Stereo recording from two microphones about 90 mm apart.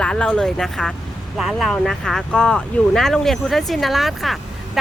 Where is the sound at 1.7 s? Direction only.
5° left (ahead or behind).